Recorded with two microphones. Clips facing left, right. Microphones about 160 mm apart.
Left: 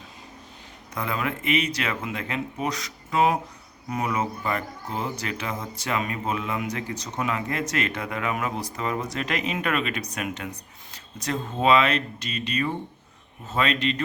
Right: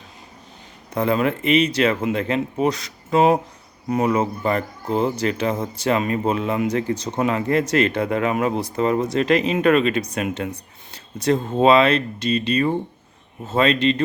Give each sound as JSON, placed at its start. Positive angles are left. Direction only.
{"t": 0.9, "sound": "speech", "side_deg": -30}